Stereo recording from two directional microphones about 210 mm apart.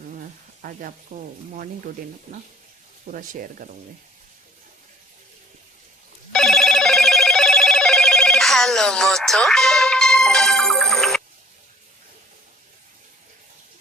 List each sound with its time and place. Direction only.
0.6 s speech: 40° right (ahead or behind)
3.1 s speech: 40° right (ahead or behind)
6.3 s telephone bell ringing: centre (ahead or behind)